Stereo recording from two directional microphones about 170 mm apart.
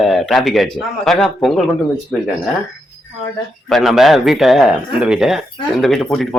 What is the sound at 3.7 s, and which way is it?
A man's voice, centre (ahead or behind).